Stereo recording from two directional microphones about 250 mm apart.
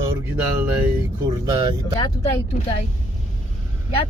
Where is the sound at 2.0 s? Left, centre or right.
Centre.